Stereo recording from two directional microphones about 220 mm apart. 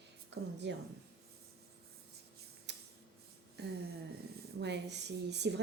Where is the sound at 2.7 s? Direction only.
50° right (ahead or behind).